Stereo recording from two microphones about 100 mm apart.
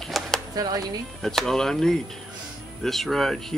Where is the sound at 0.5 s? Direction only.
40° right (ahead or behind).